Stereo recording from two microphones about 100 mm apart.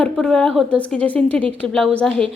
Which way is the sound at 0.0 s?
10° left (ahead or behind).